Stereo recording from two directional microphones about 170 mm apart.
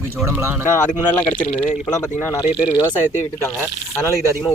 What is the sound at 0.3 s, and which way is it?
Speech, 15° right (ahead or behind).